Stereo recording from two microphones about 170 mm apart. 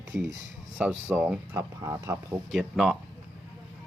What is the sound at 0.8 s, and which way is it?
Speech, 10° right (ahead or behind).